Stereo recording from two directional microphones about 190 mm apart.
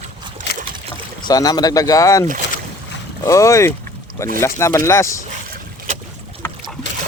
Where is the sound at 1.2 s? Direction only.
20° left (ahead or behind).